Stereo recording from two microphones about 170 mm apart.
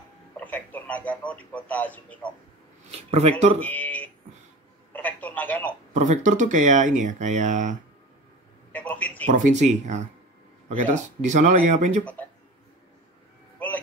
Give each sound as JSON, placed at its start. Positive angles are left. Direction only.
{"t": 0.4, "sound": "a man's voice", "side_deg": 10}
{"t": 3.1, "sound": "speech", "side_deg": -40}
{"t": 3.5, "sound": "speech", "side_deg": 10}
{"t": 4.9, "sound": "telephone", "side_deg": 10}
{"t": 5.9, "sound": "speech", "side_deg": -45}
{"t": 8.7, "sound": "a man's voice", "side_deg": 10}
{"t": 9.3, "sound": "speech", "side_deg": -45}
{"t": 11.1, "sound": "speech", "side_deg": -45}
{"t": 12.0, "sound": "speech", "side_deg": 10}